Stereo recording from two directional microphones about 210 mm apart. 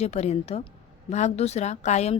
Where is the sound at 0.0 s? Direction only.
30° left (ahead or behind).